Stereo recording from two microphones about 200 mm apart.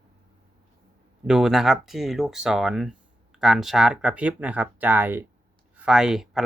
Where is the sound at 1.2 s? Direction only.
5° right (ahead or behind).